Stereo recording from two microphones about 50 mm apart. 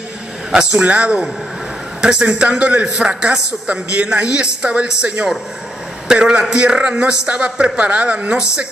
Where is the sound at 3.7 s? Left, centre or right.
Right.